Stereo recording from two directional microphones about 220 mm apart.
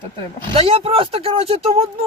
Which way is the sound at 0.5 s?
25° right (ahead or behind).